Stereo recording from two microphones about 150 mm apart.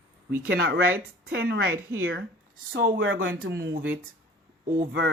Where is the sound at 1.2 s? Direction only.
90° right.